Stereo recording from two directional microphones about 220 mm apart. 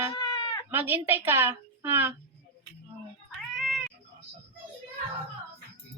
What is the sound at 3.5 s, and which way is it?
Cat, centre (ahead or behind).